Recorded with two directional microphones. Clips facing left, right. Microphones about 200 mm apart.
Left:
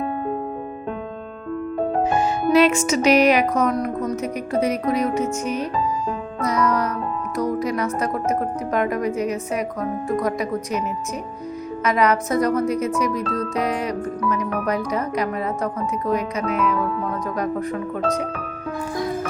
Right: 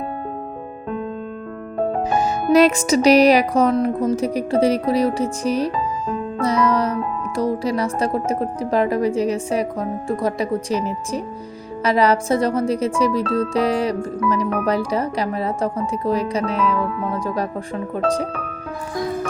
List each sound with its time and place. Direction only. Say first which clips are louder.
2.0 s music: right 1 dB; 40° right (ahead or behind)
6.4 s speech: right 2 dB; 30° right (ahead or behind)
13.5 s music: right 4 dB; 30° right (ahead or behind)
17.1 s speech: right 1 dB; 30° right (ahead or behind)